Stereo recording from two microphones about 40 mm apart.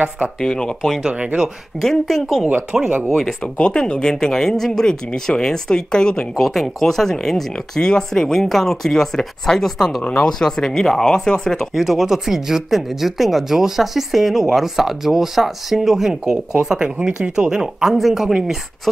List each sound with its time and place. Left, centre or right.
0.4 s speech: centre
1.0 s speech: right
1.8 s speech: centre
2.7 s speech: centre
3.1 s speech: centre
3.5 s speech: left
6.4 s speech: centre
11.7 s speech: centre
17.9 s speech: centre
18.2 s speech: centre